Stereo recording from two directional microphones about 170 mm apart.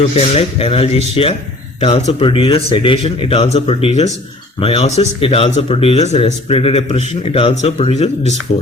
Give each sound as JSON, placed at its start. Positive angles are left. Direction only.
{"t": 0.2, "sound": "speech", "side_deg": 35}